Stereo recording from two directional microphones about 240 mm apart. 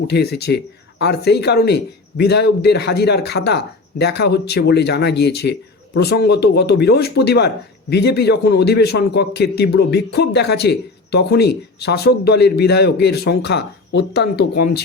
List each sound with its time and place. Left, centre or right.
0.1 s speech: left